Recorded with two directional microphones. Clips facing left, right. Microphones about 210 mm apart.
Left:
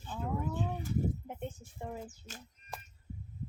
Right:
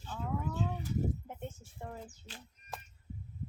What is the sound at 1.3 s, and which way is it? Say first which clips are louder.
Speech: left 3 dB; 15° left (ahead or behind).